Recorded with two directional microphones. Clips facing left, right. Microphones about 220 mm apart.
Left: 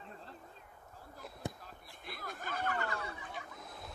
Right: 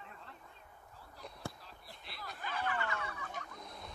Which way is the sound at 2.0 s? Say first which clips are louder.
Left 2 dB; 50° left (ahead or behind).